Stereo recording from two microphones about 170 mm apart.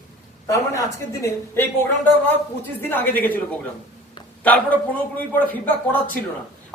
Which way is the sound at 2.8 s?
10° left (ahead or behind).